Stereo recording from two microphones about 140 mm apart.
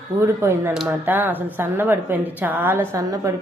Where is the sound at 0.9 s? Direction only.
15° right (ahead or behind).